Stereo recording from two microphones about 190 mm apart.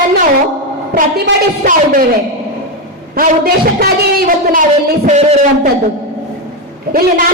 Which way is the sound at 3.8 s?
50° right (ahead or behind).